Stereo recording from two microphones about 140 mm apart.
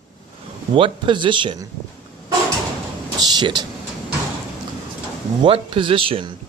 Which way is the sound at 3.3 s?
30° right (ahead or behind).